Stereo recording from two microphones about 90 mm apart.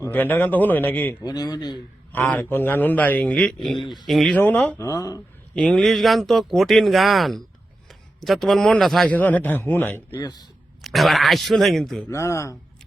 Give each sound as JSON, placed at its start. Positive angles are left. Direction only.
{"t": 0.1, "sound": "speech", "side_deg": 20}
{"t": 1.2, "sound": "speech", "side_deg": 45}
{"t": 2.3, "sound": "speech", "side_deg": 25}
{"t": 4.4, "sound": "speech", "side_deg": 20}
{"t": 4.8, "sound": "speech", "side_deg": 40}
{"t": 5.5, "sound": "a man's voice", "side_deg": 5}
{"t": 9.0, "sound": "speech", "side_deg": 20}
{"t": 10.2, "sound": "speech", "side_deg": 45}
{"t": 10.8, "sound": "speech", "side_deg": 0}
{"t": 12.0, "sound": "speech", "side_deg": 30}